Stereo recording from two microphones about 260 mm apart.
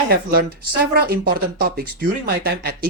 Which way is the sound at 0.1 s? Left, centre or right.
Right.